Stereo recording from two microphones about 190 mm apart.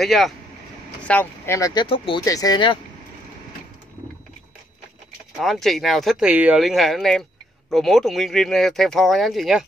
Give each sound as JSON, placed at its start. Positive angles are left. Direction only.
{"t": 0.0, "sound": "speech", "side_deg": 0}
{"t": 5.4, "sound": "speech", "side_deg": 0}